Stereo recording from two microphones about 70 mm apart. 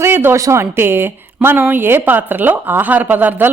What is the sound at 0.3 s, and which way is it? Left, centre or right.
Speech, right.